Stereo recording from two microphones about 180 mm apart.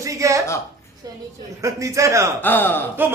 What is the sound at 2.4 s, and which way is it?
Speech, 10° left (ahead or behind).